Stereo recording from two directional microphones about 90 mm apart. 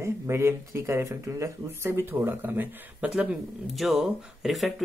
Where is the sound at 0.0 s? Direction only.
30° right (ahead or behind).